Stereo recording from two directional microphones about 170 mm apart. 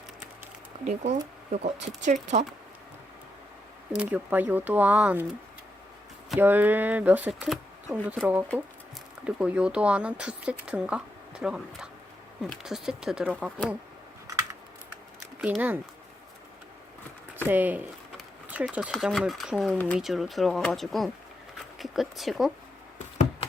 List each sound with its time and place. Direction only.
0.9 s speech: 40° right (ahead or behind)
3.9 s speech: 10° right (ahead or behind)
6.3 s speech: 10° right (ahead or behind)
15.4 s speech: 5° right (ahead or behind)
17.3 s speech: 10° right (ahead or behind)